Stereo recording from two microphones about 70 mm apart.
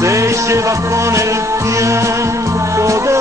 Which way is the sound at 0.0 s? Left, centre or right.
Right.